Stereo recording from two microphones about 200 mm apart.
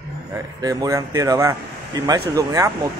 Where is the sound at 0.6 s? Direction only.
15° right (ahead or behind).